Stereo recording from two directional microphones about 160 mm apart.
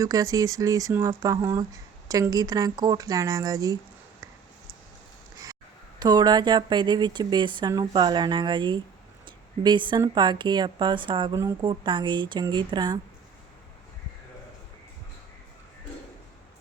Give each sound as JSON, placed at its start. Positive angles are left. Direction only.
{"t": 0.0, "sound": "speech", "side_deg": -20}
{"t": 6.0, "sound": "speech", "side_deg": -25}